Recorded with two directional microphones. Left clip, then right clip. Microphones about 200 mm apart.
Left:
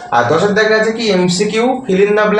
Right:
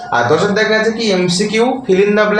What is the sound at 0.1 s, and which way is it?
A man's voice, 15° right (ahead or behind).